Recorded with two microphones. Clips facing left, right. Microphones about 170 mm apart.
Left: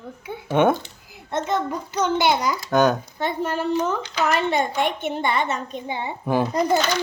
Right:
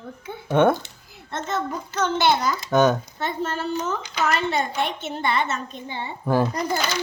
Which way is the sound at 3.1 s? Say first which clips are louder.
Left 3 dB; 15° left (ahead or behind).